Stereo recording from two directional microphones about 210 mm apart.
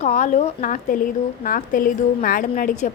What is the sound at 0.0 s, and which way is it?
A woman's voice, 35° left (ahead or behind).